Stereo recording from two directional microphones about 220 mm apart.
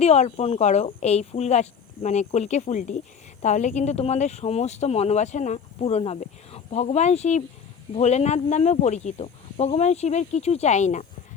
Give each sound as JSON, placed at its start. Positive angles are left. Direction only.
{"t": 0.0, "sound": "speech", "side_deg": 30}